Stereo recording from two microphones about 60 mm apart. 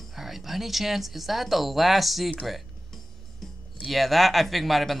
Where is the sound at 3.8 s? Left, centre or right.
Centre.